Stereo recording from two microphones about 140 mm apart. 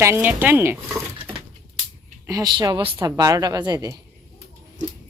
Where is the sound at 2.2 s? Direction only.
25° right (ahead or behind).